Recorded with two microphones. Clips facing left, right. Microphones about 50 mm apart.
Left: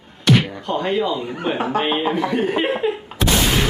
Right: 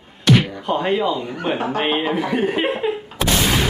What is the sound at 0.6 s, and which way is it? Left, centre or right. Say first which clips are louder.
Speech: right 1 dB; centre.